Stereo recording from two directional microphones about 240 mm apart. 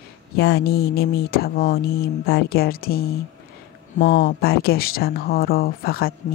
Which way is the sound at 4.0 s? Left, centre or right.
Left.